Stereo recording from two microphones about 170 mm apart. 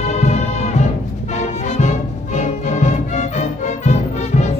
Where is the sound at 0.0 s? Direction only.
40° left (ahead or behind).